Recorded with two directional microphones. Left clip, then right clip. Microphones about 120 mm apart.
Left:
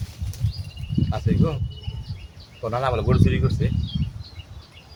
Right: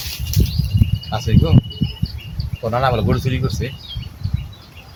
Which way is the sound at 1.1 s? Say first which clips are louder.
Right 5 dB; 15° left (ahead or behind).